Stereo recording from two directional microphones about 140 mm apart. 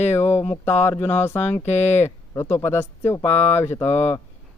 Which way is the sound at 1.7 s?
50° left (ahead or behind).